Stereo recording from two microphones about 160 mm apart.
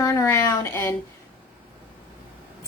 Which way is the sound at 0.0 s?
20° left (ahead or behind).